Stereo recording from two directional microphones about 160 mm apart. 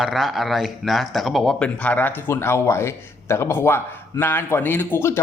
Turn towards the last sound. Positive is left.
turn(degrees=15)  # may be behind; listen again after turning